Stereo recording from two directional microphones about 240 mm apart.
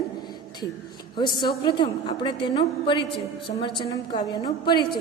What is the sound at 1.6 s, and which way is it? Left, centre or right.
A woman's voice, centre.